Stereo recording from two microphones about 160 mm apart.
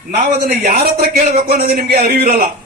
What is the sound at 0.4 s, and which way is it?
Speech, 70° right (ahead or behind).